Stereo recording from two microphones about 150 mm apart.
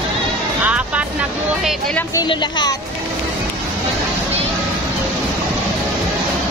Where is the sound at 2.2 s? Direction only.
30° left (ahead or behind).